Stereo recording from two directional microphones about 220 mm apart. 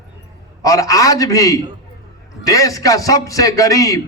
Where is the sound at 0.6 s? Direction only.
15° left (ahead or behind).